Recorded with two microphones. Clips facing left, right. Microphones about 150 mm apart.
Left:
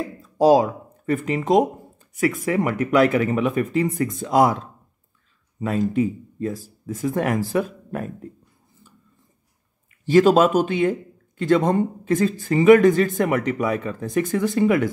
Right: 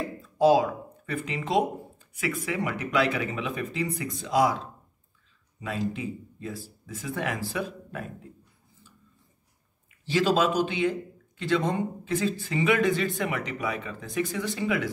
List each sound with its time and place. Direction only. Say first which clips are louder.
0.2 s a man's voice: left 5 dB; 40° left (ahead or behind)
5.6 s a man's voice: left 10 dB; 45° left (ahead or behind)
10.0 s a man's voice: left 9 dB; 50° left (ahead or behind)